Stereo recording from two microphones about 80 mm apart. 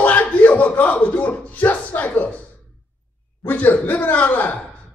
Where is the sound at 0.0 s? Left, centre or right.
Left.